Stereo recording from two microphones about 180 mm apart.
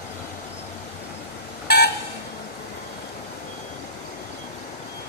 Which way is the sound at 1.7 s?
60° left (ahead or behind).